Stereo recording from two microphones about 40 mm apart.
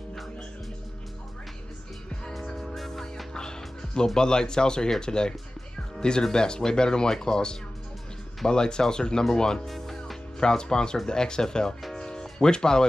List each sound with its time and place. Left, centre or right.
2.4 s music: centre
3.3 s music: centre
5.0 s speech: centre
9.7 s music: centre
10.4 s speech: centre
12.0 s music: centre